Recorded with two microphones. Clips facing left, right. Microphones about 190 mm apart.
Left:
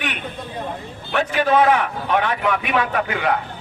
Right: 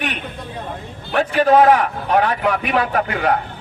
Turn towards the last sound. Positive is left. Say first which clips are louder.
# right 2 dB
turn(degrees=-45)  # may be behind; listen again after turning